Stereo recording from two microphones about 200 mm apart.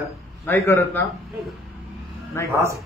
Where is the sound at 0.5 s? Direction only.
10° left (ahead or behind).